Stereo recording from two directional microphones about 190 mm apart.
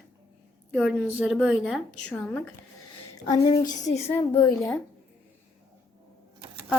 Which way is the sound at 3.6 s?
40° left (ahead or behind).